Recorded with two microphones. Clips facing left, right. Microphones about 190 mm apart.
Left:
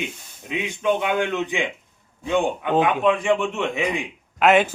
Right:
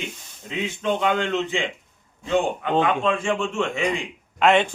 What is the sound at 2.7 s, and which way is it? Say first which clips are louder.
A man's voice: left 2 dB; 15° left (ahead or behind).